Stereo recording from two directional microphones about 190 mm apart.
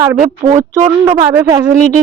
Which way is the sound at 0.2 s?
35° right (ahead or behind).